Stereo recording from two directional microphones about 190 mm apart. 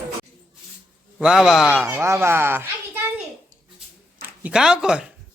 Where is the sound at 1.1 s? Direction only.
5° right (ahead or behind).